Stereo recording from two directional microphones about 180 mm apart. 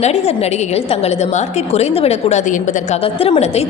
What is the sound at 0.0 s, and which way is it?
A woman's voice, 35° left (ahead or behind).